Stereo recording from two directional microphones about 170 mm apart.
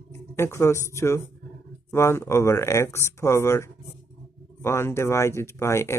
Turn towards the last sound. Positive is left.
turn(degrees=15)  # may be behind; listen again after turning